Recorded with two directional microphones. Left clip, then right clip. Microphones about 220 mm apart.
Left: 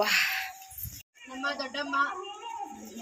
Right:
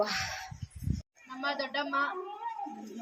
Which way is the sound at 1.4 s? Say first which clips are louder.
Even; 20° right (ahead or behind).